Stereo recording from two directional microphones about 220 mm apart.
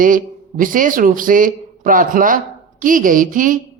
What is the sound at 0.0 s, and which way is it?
A woman's voice, 40° right (ahead or behind).